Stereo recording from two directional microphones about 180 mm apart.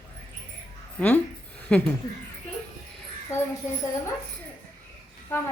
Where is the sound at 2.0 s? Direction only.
55° right (ahead or behind).